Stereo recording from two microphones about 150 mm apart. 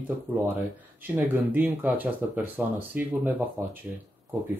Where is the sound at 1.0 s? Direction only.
15° right (ahead or behind).